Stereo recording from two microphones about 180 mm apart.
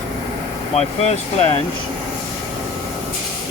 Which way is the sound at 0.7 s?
35° left (ahead or behind).